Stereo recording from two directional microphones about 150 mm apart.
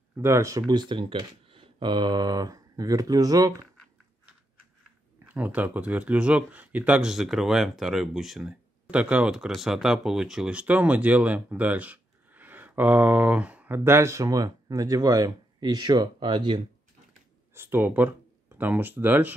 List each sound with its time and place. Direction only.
0.2 s speech: 20° right (ahead or behind)
5.3 s speech: 10° right (ahead or behind); by 16.6 s 30° right (ahead or behind)
17.6 s speech: 15° right (ahead or behind)